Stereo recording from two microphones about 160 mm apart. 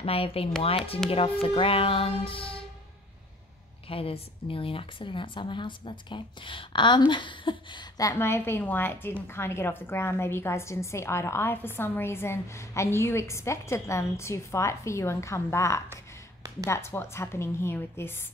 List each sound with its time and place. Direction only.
0.0 s speech: 35° left (ahead or behind)
3.9 s speech: 35° left (ahead or behind); by 18.1 s 15° left (ahead or behind)